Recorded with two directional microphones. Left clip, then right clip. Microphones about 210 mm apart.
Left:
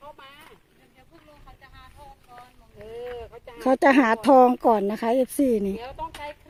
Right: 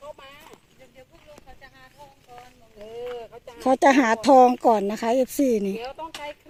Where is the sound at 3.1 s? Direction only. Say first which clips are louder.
Right 1 dB; 50° left (ahead or behind).